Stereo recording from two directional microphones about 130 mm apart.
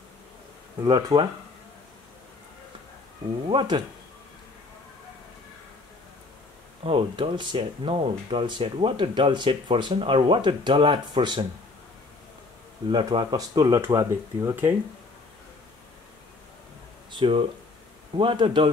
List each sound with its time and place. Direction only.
0.8 s speech: 40° right (ahead or behind)
3.4 s speech: 40° right (ahead or behind)
6.8 s speech: 45° right (ahead or behind)
12.9 s speech: 35° right (ahead or behind)
13.7 s speech: 20° right (ahead or behind)
17.1 s speech: 40° right (ahead or behind)